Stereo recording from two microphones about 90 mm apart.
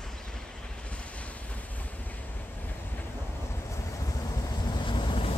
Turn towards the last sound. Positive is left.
turn(degrees=65)  # may be behind; listen again after turning